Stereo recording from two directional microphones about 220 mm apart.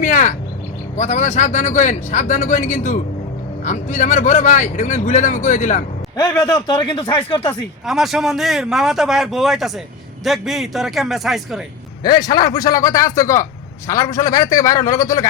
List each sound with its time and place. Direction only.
0.0 s bird: 35° left (ahead or behind)
0.9 s speech: 35° left (ahead or behind)
6.1 s speech: 15° left (ahead or behind)
7.9 s a man's voice: centre (ahead or behind)
12.0 s a man's voice: 20° left (ahead or behind)